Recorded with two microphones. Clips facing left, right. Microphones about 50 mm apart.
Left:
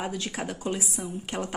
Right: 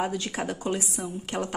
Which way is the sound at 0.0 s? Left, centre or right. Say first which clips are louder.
Right 3 dB; centre.